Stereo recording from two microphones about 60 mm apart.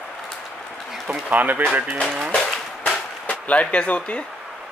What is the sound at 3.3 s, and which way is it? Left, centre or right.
Speech, left.